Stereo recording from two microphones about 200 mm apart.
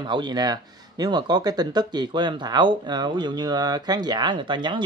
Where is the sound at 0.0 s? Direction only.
20° right (ahead or behind).